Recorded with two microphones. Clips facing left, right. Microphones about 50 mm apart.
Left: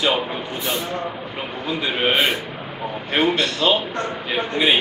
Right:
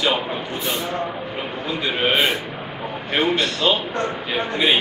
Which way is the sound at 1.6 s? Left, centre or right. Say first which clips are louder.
Left 1 dB; centre.